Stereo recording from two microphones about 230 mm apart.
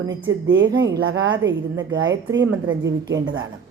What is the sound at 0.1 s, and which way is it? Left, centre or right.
Speech, centre.